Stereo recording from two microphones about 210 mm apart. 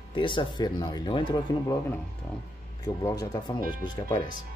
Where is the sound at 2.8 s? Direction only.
15° left (ahead or behind).